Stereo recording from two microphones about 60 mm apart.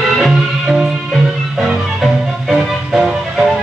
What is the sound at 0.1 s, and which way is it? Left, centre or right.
Music, centre.